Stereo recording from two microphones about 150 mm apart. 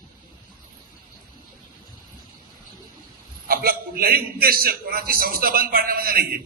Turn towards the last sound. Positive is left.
turn(degrees=-80)